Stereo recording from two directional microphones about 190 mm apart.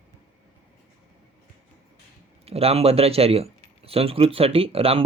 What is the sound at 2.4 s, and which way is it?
Speech, 30° right (ahead or behind).